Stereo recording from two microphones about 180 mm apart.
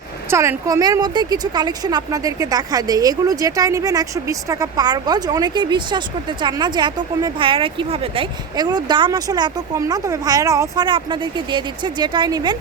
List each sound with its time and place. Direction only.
0.3 s a woman's voice: 15° right (ahead or behind)